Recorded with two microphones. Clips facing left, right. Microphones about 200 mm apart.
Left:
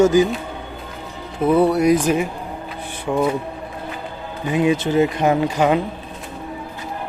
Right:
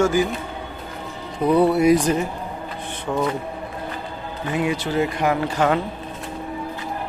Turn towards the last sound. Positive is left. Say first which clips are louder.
# left 3 dB
turn(degrees=15)  # may be behind; listen again after turning